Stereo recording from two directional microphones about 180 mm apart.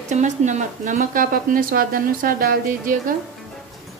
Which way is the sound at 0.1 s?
40° right (ahead or behind).